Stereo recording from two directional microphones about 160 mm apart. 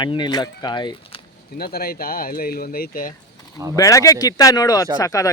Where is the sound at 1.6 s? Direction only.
75° left (ahead or behind).